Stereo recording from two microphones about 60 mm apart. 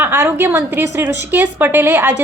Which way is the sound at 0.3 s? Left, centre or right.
Right.